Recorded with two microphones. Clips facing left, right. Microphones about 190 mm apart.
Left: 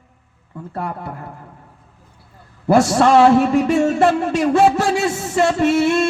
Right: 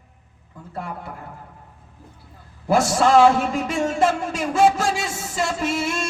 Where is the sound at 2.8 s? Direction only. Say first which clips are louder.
Left 3 dB; 70° left (ahead or behind).